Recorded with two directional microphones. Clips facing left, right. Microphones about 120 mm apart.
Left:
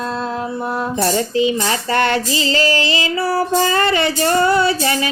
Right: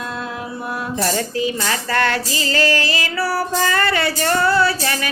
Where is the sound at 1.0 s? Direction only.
25° left (ahead or behind).